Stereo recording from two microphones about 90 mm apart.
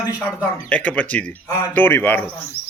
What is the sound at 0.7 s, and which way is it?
A man's voice, 15° left (ahead or behind).